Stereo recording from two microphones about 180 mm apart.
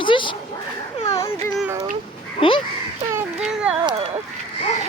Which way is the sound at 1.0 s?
20° left (ahead or behind).